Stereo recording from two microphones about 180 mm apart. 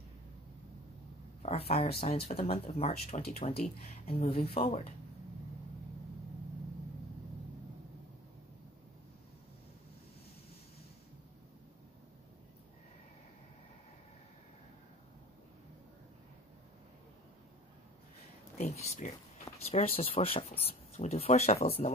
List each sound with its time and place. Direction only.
1.4 s speech: 35° left (ahead or behind)
18.7 s speech: 40° left (ahead or behind)